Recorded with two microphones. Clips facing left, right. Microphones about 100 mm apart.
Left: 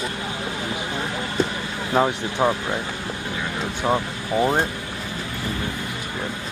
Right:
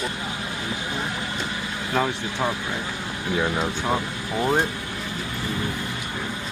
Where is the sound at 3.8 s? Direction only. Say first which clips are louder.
Left 3 dB; 10° left (ahead or behind).